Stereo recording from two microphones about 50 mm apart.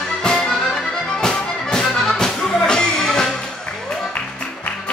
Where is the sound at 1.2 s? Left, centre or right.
Centre.